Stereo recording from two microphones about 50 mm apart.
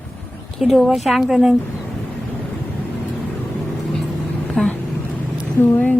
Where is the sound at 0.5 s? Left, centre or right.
Centre.